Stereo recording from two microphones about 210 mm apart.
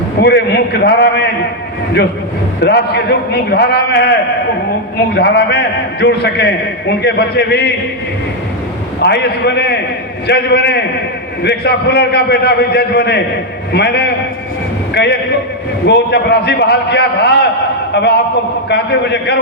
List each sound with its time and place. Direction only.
0.2 s a man's voice: 50° left (ahead or behind)
2.6 s a man's voice: 50° left (ahead or behind)
5.1 s a man's voice: 55° left (ahead or behind)
9.0 s a man's voice: 50° left (ahead or behind)